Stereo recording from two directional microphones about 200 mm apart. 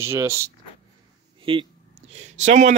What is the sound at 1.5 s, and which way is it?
Speech, 25° right (ahead or behind).